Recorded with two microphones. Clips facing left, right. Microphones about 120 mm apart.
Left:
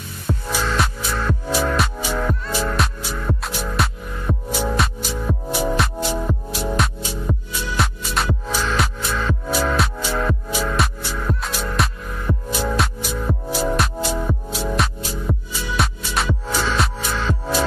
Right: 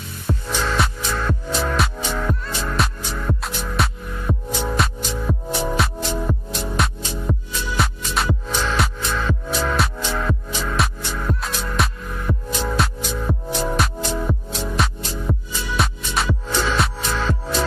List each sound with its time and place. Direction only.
0.5 s music: 5° left (ahead or behind)